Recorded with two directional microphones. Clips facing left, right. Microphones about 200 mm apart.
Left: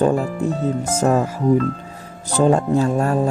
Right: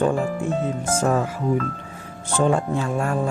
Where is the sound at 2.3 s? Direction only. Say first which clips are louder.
Left 5 dB; 40° left (ahead or behind).